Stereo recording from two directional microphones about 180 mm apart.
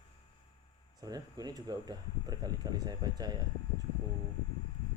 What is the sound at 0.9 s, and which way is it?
Speech, 20° right (ahead or behind).